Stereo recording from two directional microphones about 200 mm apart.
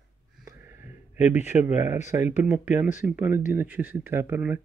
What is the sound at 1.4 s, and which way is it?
Speech, 10° right (ahead or behind).